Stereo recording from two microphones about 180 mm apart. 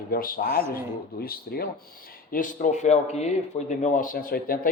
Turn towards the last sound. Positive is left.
turn(degrees=50)  # may be behind; listen again after turning